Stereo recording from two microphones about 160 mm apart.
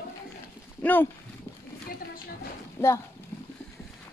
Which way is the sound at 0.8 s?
10° left (ahead or behind).